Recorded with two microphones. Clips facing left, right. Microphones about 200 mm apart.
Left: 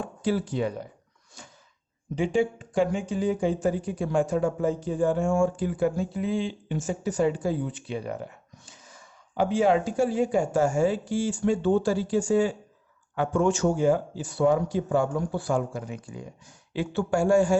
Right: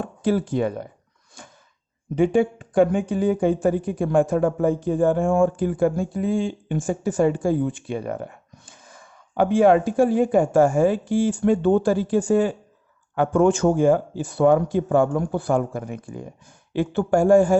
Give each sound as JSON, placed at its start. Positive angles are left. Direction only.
{"t": 0.0, "sound": "speech", "side_deg": -50}
{"t": 2.1, "sound": "a man's voice", "side_deg": -55}